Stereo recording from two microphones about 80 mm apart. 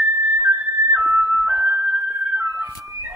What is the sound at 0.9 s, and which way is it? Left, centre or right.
Music, right.